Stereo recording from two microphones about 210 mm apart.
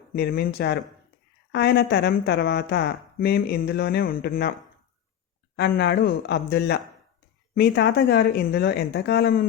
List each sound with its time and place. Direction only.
0.1 s speech: 45° left (ahead or behind)
5.5 s speech: 50° left (ahead or behind)